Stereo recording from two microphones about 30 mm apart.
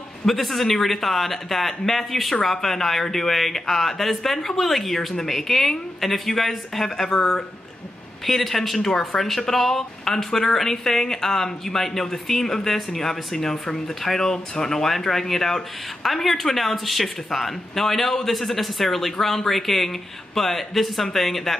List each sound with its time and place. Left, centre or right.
0.3 s speech: centre
7.2 s speech: left
8.3 s speech: centre